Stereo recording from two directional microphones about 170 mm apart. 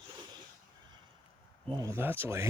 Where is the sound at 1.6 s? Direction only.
20° right (ahead or behind).